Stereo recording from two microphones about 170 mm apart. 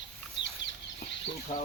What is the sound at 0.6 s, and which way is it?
Chicken, 90° left.